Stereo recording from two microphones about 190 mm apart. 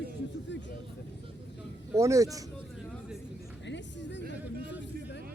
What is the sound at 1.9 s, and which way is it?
Speech, 15° right (ahead or behind).